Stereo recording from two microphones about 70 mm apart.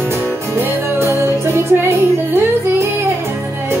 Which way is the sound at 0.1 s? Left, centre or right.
Right.